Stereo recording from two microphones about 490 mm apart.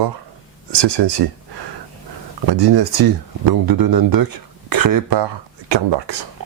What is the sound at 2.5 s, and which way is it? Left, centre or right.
Speech, right.